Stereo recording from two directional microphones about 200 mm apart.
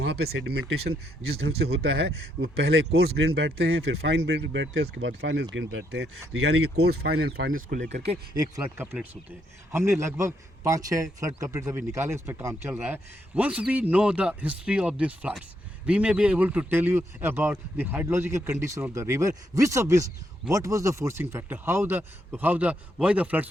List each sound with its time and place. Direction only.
0.0 s speech: 55° right (ahead or behind); by 8.2 s 30° right (ahead or behind)
8.6 s speech: 10° right (ahead or behind)